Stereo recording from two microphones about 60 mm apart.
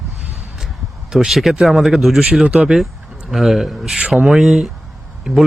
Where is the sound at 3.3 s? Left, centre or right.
Centre.